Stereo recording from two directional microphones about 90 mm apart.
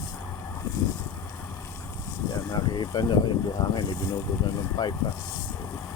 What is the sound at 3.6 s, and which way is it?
Speech, 40° left (ahead or behind).